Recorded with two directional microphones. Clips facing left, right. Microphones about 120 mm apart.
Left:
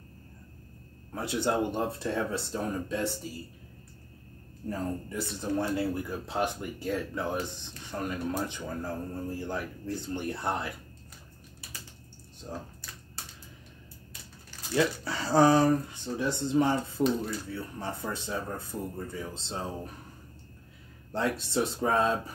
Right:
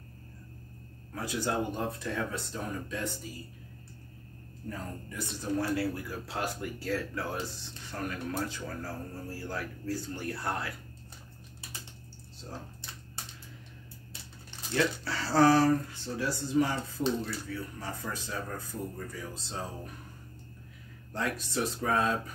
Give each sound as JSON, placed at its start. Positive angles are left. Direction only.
{"t": 1.1, "sound": "speech", "side_deg": 25}
{"t": 4.6, "sound": "speech", "side_deg": 30}
{"t": 12.4, "sound": "speech", "side_deg": 10}
{"t": 14.7, "sound": "speech", "side_deg": 20}
{"t": 21.1, "sound": "speech", "side_deg": 30}